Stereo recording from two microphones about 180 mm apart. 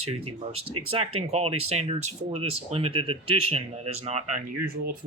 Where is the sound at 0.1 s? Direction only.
35° right (ahead or behind).